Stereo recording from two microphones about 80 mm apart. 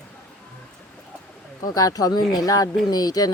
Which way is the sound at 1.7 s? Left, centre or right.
Left.